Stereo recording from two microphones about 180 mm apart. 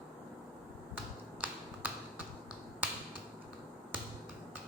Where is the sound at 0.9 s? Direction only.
10° right (ahead or behind).